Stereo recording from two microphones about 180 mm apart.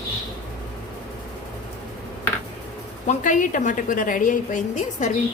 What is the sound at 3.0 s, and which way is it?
A woman's voice, 45° left (ahead or behind).